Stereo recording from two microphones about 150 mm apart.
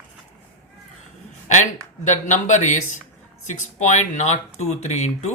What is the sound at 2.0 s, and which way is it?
Speech, 55° left (ahead or behind).